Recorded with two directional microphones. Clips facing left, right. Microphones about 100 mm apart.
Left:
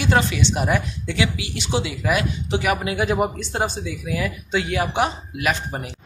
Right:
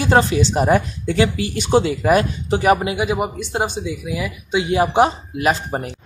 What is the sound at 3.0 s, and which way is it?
Speech, 10° right (ahead or behind).